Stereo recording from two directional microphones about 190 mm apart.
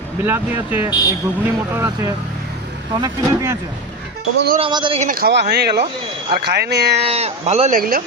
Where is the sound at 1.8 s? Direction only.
15° right (ahead or behind).